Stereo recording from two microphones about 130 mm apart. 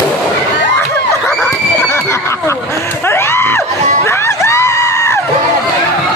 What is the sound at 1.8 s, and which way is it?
Screaming, 20° left (ahead or behind).